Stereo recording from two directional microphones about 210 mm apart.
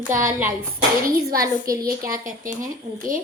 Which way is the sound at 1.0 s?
45° right (ahead or behind).